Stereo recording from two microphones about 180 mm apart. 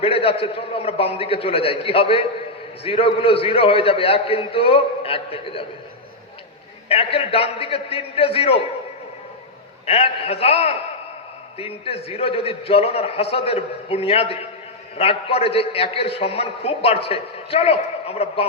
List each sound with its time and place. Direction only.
0.0 s a man's voice: 30° left (ahead or behind)
6.8 s a man's voice: 30° left (ahead or behind)
9.8 s a man's voice: 35° left (ahead or behind)